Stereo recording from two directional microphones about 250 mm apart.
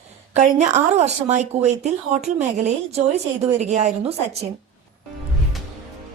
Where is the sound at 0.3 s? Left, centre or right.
Right.